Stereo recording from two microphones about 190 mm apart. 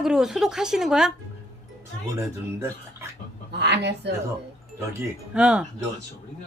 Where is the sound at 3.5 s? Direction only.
60° right (ahead or behind).